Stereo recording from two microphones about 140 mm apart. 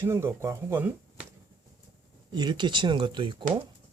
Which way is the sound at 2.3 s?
30° right (ahead or behind).